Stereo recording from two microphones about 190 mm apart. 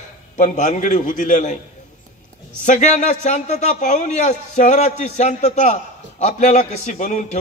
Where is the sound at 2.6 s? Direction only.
40° left (ahead or behind).